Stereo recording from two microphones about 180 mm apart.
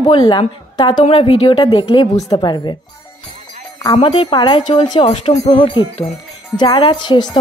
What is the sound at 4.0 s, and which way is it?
Speech, 30° left (ahead or behind).